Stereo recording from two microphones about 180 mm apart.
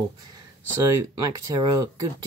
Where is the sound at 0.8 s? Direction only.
20° right (ahead or behind).